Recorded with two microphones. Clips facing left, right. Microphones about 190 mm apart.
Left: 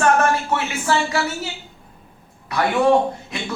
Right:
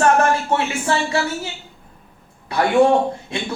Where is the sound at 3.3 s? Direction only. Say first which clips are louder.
Right 3 dB; 30° right (ahead or behind).